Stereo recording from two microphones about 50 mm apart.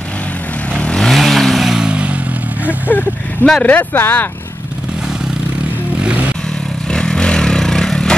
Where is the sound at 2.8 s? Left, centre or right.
Left.